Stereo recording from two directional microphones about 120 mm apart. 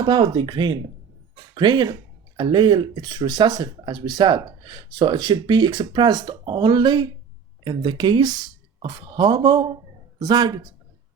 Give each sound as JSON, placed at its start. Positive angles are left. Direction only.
{"t": 0.0, "sound": "speech", "side_deg": -40}